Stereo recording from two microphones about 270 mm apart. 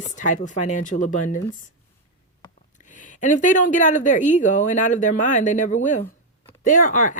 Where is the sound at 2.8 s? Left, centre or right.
Left.